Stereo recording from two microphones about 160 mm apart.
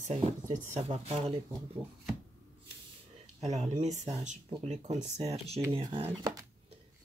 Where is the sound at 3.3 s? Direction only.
45° right (ahead or behind).